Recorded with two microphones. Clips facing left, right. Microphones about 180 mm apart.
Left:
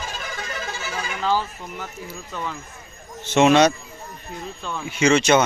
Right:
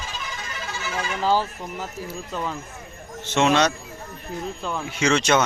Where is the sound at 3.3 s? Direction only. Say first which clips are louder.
Left 4 dB; 15° left (ahead or behind).